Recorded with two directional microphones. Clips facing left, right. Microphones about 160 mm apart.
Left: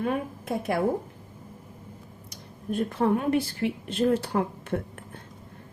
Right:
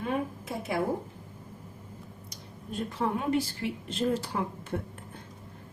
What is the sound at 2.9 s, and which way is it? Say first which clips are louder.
A woman's voice: left 4 dB; 60° left (ahead or behind).